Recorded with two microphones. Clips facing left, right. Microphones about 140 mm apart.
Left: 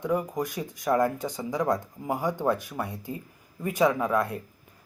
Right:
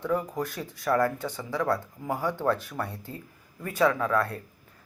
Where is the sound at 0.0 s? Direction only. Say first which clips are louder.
Left 1 dB; 15° left (ahead or behind).